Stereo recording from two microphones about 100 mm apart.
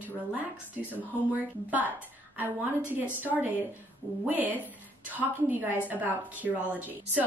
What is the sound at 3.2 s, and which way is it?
A woman's voice, 15° right (ahead or behind).